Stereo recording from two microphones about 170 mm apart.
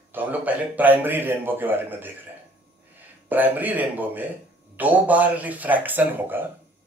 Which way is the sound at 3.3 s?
10° right (ahead or behind).